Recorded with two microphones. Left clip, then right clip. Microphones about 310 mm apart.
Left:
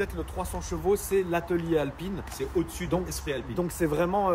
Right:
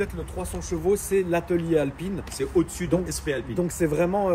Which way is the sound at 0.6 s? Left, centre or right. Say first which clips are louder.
Right 3 dB; centre.